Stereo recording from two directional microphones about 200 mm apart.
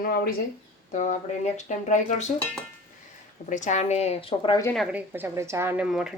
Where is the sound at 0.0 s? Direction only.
45° left (ahead or behind).